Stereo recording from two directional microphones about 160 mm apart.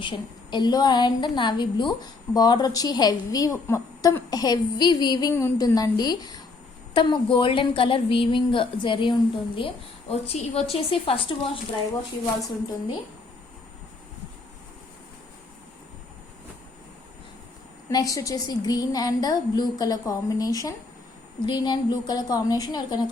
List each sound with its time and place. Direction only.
0.0 s a woman's voice: 30° left (ahead or behind)
17.8 s a woman's voice: 20° left (ahead or behind)